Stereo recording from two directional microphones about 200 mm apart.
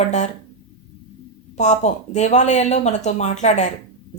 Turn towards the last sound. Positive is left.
turn(degrees=35)  # may be behind; listen again after turning